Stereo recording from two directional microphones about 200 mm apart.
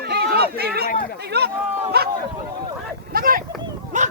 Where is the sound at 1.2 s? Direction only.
55° right (ahead or behind).